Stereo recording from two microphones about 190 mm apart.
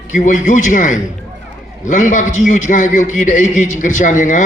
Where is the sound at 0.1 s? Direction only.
45° left (ahead or behind).